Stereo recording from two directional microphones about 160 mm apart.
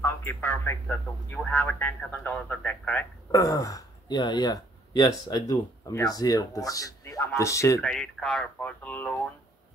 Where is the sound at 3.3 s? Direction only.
20° left (ahead or behind).